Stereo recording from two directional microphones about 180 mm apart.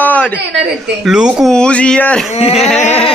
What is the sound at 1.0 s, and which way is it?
Speech, 5° right (ahead or behind).